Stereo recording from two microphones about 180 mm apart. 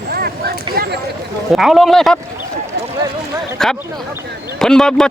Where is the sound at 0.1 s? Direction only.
60° right (ahead or behind).